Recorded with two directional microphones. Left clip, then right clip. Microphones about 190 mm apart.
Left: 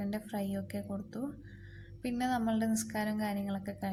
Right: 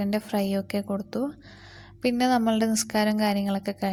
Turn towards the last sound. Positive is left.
turn(degrees=-45)  # may be behind; listen again after turning